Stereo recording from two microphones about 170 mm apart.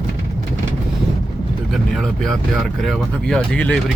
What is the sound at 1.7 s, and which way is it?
Speech, centre (ahead or behind).